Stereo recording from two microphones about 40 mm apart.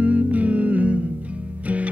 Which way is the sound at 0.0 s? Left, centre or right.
Right.